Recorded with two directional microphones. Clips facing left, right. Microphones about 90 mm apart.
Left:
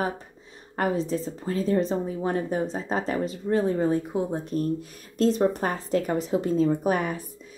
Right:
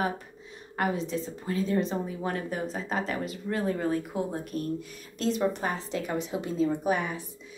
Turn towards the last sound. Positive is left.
turn(degrees=50)  # may be behind; listen again after turning